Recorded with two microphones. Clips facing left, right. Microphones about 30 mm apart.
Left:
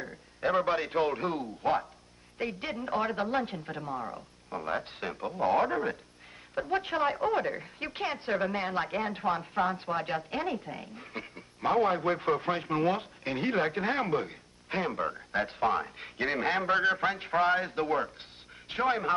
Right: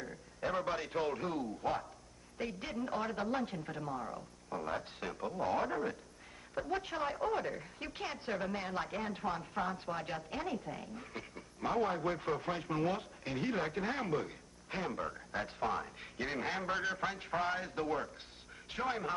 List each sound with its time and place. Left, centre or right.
0.4 s a woman's voice: left